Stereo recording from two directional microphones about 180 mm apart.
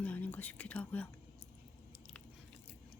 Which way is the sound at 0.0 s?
10° left (ahead or behind).